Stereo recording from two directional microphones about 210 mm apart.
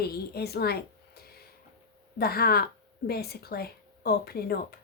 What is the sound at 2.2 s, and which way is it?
Speech, 45° left (ahead or behind).